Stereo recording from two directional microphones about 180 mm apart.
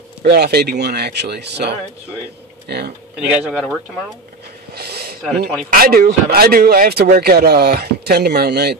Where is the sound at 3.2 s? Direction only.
5° right (ahead or behind).